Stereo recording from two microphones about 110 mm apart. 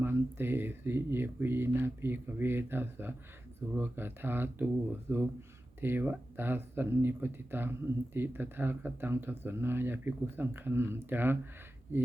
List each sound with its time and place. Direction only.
0.0 s speech: 20° right (ahead or behind)